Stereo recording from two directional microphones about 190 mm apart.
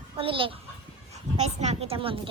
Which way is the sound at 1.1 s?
35° right (ahead or behind).